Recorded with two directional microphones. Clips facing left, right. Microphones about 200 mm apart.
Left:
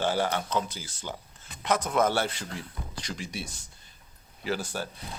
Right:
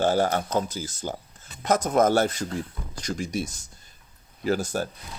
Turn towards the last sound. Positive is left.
turn(degrees=-45)  # may be behind; listen again after turning